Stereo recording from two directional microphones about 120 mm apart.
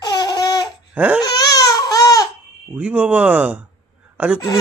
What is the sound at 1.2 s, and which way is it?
Baby cry, 30° left (ahead or behind).